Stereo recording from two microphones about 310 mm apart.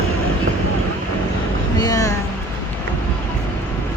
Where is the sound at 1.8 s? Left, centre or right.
Centre.